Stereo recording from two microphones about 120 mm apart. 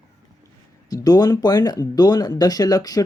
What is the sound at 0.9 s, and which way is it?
Speech, 35° left (ahead or behind).